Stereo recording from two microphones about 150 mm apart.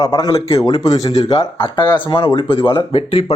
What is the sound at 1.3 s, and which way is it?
Speech, 35° left (ahead or behind).